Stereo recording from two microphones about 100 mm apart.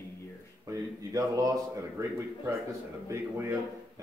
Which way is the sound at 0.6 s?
35° right (ahead or behind).